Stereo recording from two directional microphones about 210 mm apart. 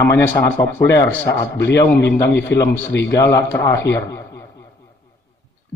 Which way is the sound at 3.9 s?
15° left (ahead or behind).